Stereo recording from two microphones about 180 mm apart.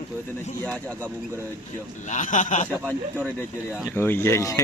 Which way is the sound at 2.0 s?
45° left (ahead or behind).